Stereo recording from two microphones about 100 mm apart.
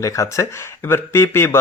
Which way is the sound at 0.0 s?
30° left (ahead or behind).